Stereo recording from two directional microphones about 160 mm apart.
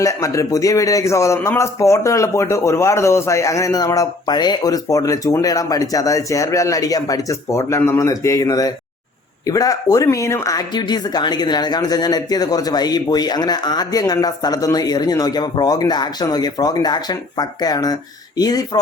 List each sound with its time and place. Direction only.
0.0 s speech: 20° left (ahead or behind)